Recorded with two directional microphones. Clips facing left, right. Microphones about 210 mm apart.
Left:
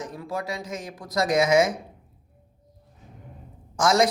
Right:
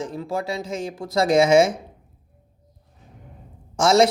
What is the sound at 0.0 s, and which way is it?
Speech, 25° right (ahead or behind).